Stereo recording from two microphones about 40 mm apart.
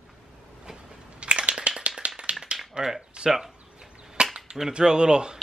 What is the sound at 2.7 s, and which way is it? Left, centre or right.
Speech, centre.